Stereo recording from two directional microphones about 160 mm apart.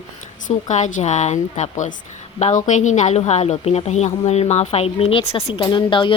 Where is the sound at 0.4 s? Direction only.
50° left (ahead or behind).